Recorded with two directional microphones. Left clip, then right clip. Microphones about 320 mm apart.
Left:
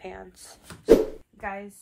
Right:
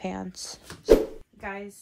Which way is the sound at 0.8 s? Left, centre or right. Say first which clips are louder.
Left 1 dB; centre.